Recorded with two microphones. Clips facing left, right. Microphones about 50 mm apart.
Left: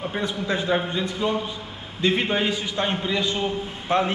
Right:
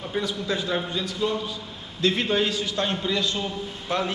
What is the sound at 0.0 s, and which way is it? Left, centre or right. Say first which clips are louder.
A man's voice: left 1 dB; left.